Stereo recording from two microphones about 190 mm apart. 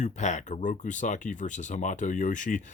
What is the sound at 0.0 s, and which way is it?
Speech, 40° left (ahead or behind).